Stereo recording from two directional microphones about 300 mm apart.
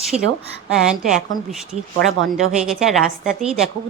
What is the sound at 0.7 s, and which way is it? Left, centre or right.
Speech, centre.